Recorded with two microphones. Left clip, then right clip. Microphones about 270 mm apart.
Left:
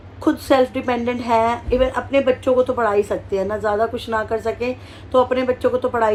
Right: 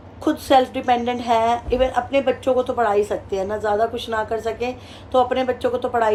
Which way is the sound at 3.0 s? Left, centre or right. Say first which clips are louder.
Left 2 dB; centre.